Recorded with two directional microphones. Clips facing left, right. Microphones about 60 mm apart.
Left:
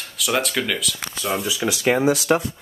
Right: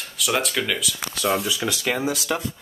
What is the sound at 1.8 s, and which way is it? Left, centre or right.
Speech, left.